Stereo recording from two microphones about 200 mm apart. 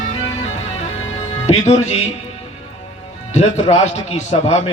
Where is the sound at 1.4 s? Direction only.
35° left (ahead or behind).